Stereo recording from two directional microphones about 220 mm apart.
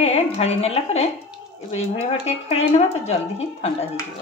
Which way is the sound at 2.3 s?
30° left (ahead or behind).